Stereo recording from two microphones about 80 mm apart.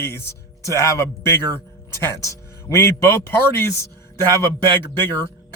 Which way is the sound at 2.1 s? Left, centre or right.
Left.